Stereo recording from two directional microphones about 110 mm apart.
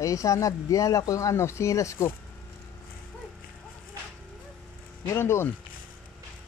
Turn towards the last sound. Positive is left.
turn(degrees=20)  # may be behind; listen again after turning